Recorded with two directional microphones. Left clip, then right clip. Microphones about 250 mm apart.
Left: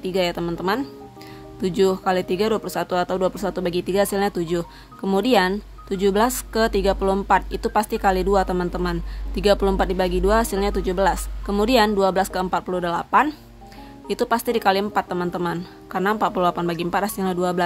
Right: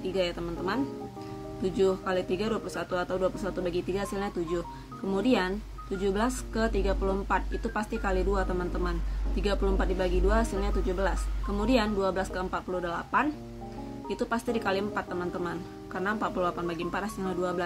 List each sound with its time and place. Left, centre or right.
0.0 s speech: left